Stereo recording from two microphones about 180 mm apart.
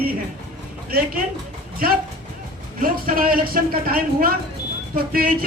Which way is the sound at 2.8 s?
55° right (ahead or behind).